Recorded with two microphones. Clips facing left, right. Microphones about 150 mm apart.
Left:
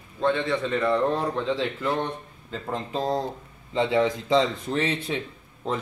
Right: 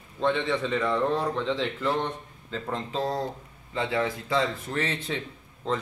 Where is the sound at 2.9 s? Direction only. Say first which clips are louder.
Left 3 dB; 15° left (ahead or behind).